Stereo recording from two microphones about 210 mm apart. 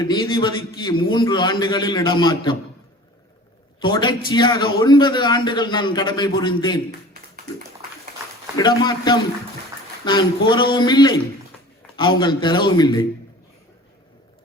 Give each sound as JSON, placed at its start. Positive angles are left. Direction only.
{"t": 0.0, "sound": "a man's voice", "side_deg": 20}
{"t": 3.8, "sound": "a man's voice", "side_deg": 20}
{"t": 8.5, "sound": "a man's voice", "side_deg": 20}